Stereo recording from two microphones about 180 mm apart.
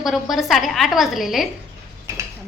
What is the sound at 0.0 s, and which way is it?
A woman's voice, centre (ahead or behind).